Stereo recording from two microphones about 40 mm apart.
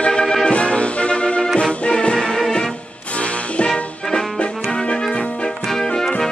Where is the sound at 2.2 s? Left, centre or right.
Centre.